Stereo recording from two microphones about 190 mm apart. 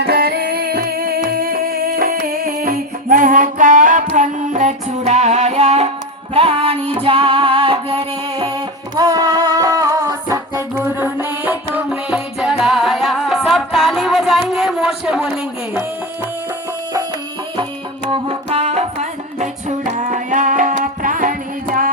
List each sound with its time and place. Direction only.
0.0 s music: 55° right (ahead or behind); by 15.3 s 5° right (ahead or behind)
18.1 s music: 30° right (ahead or behind); by 21.8 s 45° right (ahead or behind)